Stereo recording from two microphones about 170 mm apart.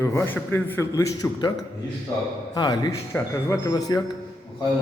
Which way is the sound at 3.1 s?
10° left (ahead or behind).